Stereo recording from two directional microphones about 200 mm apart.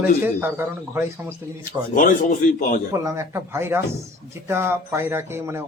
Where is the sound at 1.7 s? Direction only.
40° left (ahead or behind).